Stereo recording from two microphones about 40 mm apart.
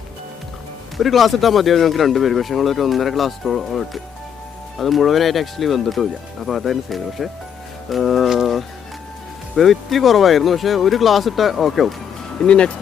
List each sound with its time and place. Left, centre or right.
0.9 s speech: centre
9.6 s speech: centre
12.4 s speech: left